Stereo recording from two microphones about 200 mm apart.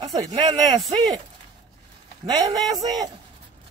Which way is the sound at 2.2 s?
20° right (ahead or behind).